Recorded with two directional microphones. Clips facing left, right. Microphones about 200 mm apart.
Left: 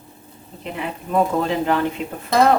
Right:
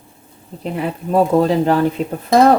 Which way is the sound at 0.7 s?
35° right (ahead or behind).